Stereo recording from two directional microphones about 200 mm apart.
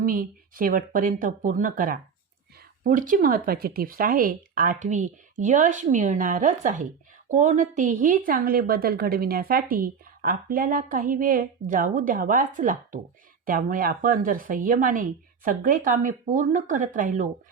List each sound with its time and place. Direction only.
0.0 s a woman's voice: 45° right (ahead or behind)